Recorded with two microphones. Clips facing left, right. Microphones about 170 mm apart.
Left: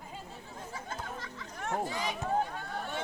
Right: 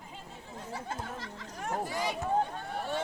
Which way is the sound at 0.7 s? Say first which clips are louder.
Right 3 dB; 35° right (ahead or behind).